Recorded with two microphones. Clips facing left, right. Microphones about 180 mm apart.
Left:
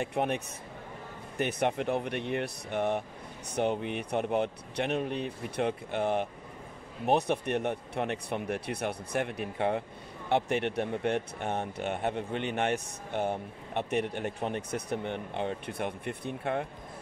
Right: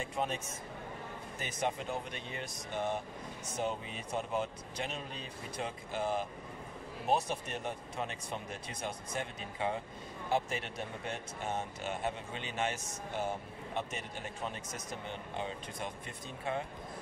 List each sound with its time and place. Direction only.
0.0 s speech: 65° left (ahead or behind)
1.4 s speech: 65° left (ahead or behind)